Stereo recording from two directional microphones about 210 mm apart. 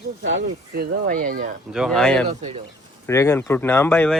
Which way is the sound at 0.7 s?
50° right (ahead or behind).